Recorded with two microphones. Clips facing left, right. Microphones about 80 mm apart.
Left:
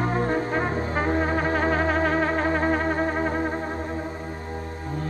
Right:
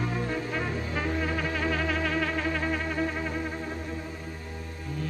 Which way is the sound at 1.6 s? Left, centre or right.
Left.